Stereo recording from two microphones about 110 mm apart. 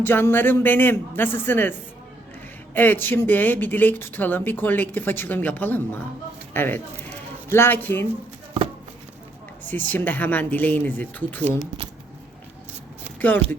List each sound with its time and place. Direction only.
0.0 s a man's voice: 20° left (ahead or behind)
2.7 s speech: 20° left (ahead or behind)
9.6 s speech: 15° left (ahead or behind)
13.1 s speech: 15° left (ahead or behind)